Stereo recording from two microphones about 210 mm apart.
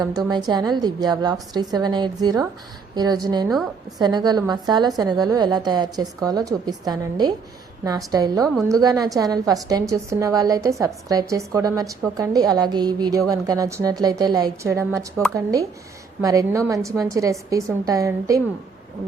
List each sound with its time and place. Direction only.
0.0 s a woman's voice: 20° right (ahead or behind)